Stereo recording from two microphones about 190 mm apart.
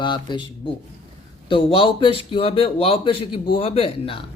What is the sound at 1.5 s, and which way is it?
Speech, 30° left (ahead or behind).